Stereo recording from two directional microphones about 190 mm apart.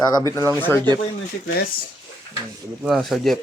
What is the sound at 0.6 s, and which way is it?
Speech, 10° left (ahead or behind).